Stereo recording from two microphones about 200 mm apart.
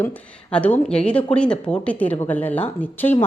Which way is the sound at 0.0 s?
10° left (ahead or behind).